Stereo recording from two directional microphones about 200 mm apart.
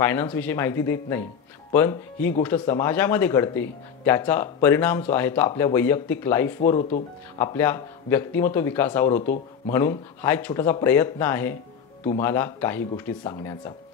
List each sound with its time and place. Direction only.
0.0 s speech: 10° left (ahead or behind)